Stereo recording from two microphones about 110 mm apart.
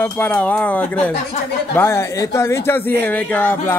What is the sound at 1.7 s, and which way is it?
A man's voice, 25° left (ahead or behind).